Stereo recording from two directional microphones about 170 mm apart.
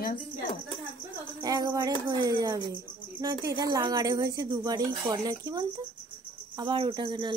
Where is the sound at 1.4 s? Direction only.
25° right (ahead or behind).